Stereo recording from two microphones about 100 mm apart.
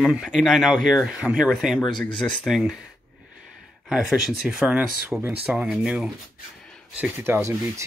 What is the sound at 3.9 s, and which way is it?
Speech, 5° right (ahead or behind).